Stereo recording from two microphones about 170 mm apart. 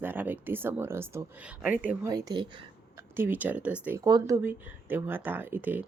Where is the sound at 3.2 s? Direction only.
10° right (ahead or behind).